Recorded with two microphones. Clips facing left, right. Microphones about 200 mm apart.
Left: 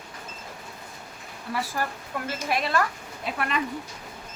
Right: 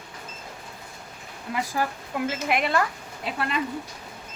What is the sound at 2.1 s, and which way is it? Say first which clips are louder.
Speech: right 3 dB; 20° right (ahead or behind).